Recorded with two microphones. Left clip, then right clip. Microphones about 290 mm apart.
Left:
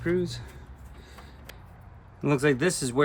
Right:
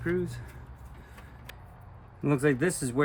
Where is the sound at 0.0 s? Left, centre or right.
Centre.